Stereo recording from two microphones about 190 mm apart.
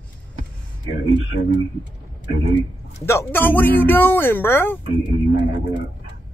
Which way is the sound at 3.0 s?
10° left (ahead or behind).